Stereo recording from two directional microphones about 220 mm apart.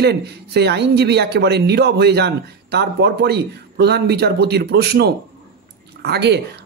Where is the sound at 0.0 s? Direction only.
50° right (ahead or behind).